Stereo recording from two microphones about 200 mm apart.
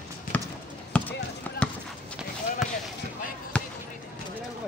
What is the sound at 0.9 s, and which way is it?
Basketball bounce, 5° left (ahead or behind).